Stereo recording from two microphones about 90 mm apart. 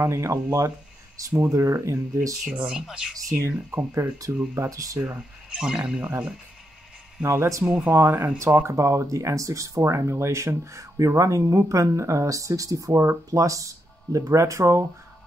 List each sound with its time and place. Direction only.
0.0 s speech: 30° right (ahead or behind)
2.4 s speech: 10° right (ahead or behind)
3.7 s speech: 30° right (ahead or behind)
5.0 s speech: 10° right (ahead or behind)
7.2 s speech: 35° right (ahead or behind)
7.6 s speech: 10° right (ahead or behind)
7.9 s speech: 25° right (ahead or behind)
8.6 s speech: 35° right (ahead or behind)